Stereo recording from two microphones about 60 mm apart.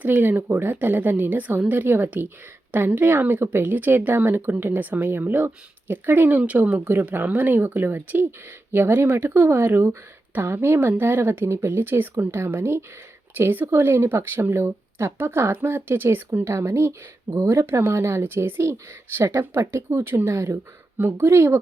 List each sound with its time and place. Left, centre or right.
0.0 s speech: right
11.4 s speech: right
16.4 s speech: right
17.3 s speech: right
17.7 s speech: right
21.0 s speech: right